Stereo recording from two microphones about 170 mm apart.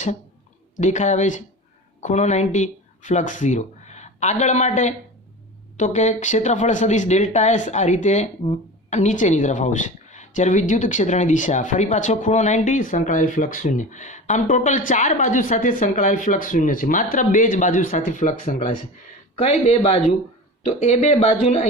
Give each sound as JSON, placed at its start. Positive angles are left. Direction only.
{"t": 0.8, "sound": "a woman's voice", "side_deg": 45}
{"t": 19.4, "sound": "speech", "side_deg": 35}